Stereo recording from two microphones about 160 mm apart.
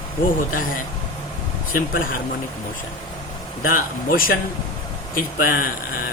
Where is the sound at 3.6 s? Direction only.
60° left (ahead or behind).